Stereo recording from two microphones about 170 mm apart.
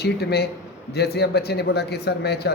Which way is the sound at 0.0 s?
70° left (ahead or behind).